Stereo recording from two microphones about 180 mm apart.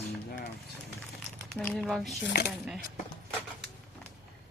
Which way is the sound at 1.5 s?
5° left (ahead or behind).